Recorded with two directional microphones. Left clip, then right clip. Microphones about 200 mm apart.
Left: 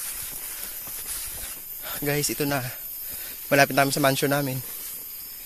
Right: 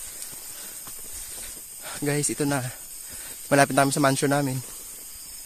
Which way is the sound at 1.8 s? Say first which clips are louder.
Left 1 dB; 25° right (ahead or behind).